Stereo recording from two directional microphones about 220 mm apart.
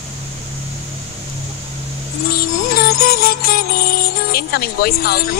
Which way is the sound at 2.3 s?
45° left (ahead or behind).